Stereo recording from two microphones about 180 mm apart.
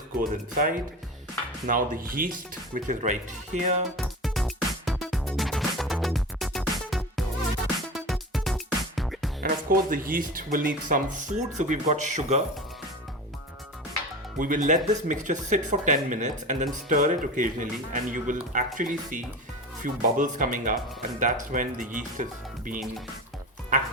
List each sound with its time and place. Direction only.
0.2 s speech: 50° right (ahead or behind)
3.9 s music: centre (ahead or behind)
9.4 s speech: 50° right (ahead or behind)
14.3 s speech: 45° right (ahead or behind)